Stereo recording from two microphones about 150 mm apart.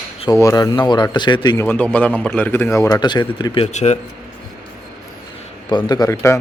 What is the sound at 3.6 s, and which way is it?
Speech, 45° left (ahead or behind).